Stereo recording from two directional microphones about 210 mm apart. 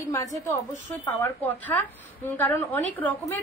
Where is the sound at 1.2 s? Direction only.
10° left (ahead or behind).